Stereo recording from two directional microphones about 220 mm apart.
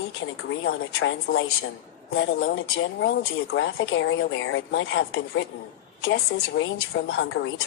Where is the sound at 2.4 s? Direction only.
55° left (ahead or behind).